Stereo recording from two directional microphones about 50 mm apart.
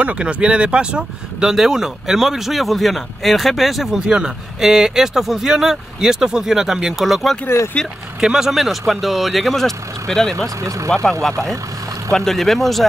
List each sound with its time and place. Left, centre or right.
0.0 s speech: right
7.4 s speech: left
8.2 s speech: centre
12.1 s speech: centre
12.4 s speech: centre